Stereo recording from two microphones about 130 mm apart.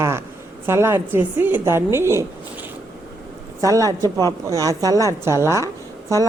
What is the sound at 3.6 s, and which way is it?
Speech, 25° right (ahead or behind).